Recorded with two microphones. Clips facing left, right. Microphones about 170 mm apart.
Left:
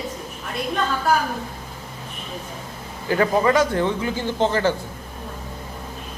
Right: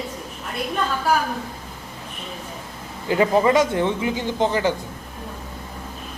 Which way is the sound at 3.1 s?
20° right (ahead or behind).